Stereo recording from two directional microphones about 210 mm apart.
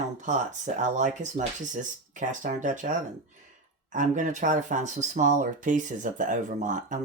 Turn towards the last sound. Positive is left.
turn(degrees=-35)  # may be behind; listen again after turning